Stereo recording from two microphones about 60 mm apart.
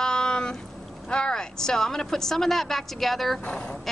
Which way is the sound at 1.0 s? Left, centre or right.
Centre.